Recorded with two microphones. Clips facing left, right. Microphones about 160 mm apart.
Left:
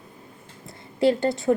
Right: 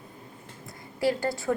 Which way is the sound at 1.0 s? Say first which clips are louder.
Left 6 dB; 25° left (ahead or behind).